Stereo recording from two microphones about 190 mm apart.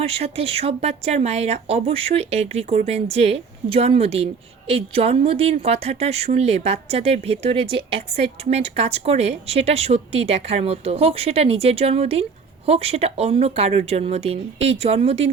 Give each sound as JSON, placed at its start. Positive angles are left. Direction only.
{"t": 0.0, "sound": "a woman's voice", "side_deg": -30}